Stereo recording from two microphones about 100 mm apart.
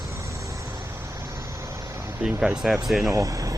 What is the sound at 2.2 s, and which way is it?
Speech, 5° right (ahead or behind).